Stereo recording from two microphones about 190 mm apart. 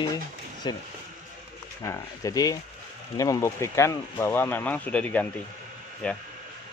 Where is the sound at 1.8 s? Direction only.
20° left (ahead or behind).